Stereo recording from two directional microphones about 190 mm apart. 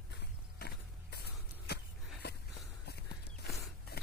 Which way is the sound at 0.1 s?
55° left (ahead or behind).